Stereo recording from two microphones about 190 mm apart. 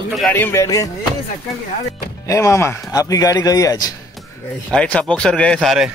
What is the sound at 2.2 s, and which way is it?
Speech, 15° left (ahead or behind).